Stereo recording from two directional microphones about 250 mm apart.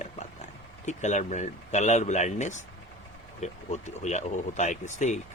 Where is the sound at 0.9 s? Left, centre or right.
Left.